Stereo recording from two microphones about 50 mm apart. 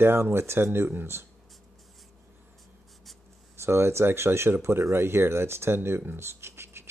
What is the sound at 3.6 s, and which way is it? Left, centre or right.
Speech, right.